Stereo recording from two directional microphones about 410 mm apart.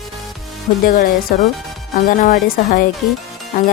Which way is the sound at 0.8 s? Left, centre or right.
Left.